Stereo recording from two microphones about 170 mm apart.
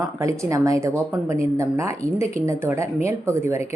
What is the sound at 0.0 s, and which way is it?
Speech, 20° right (ahead or behind).